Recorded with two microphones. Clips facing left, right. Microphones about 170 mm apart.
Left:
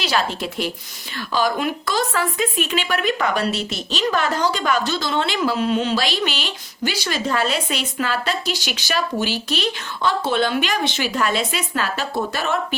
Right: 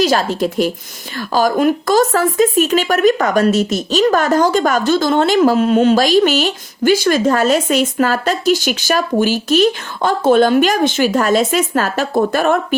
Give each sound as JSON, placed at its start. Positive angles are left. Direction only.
{"t": 0.0, "sound": "speech", "side_deg": -45}